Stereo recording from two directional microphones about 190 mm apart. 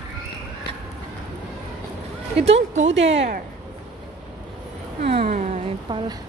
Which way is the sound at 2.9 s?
75° right (ahead or behind).